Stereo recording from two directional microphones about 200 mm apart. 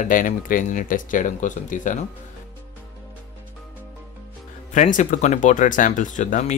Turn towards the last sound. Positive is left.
turn(degrees=40)  # may be behind; listen again after turning